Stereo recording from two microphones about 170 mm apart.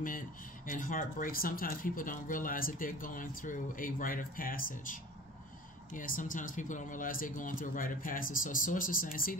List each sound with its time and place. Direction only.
0.7 s speech: 50° left (ahead or behind)